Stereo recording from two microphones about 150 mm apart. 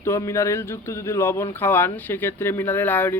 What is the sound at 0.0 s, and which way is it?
A man's voice, 20° left (ahead or behind).